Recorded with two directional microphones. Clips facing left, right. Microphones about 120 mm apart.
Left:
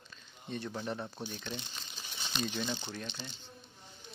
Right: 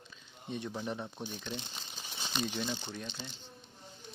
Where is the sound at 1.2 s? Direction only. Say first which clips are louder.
Even; 10° right (ahead or behind).